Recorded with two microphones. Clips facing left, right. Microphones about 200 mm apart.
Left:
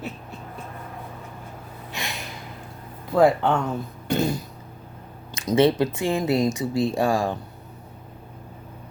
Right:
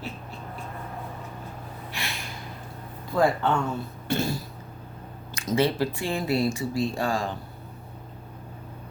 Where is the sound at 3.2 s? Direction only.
15° left (ahead or behind).